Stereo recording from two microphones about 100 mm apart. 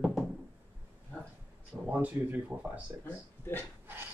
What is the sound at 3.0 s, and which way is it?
Speech, 20° left (ahead or behind).